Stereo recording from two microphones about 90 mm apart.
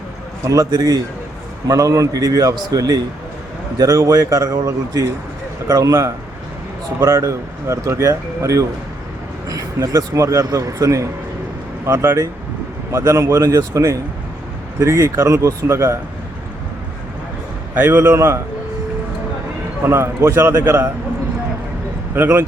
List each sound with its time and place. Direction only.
0.4 s speech: 40° right (ahead or behind)
17.7 s a man's voice: 25° right (ahead or behind)
19.8 s a man's voice: 30° right (ahead or behind)
22.1 s a man's voice: 25° right (ahead or behind)